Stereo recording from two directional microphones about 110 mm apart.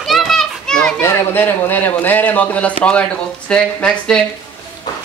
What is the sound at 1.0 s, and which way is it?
Speech, 20° left (ahead or behind).